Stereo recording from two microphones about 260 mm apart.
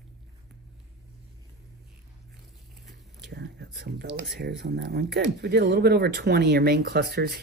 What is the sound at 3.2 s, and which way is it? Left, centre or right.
Speech, right.